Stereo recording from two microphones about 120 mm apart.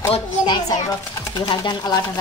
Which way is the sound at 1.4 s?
40° left (ahead or behind).